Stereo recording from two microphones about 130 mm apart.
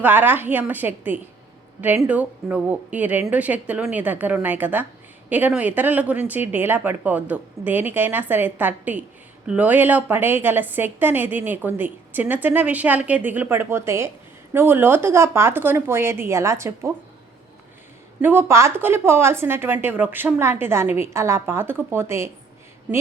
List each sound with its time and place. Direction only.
0.0 s a woman's voice: 15° right (ahead or behind)
18.2 s speech: 15° right (ahead or behind)